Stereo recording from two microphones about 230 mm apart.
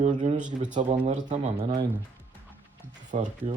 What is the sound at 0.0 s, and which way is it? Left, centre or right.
Speech, right.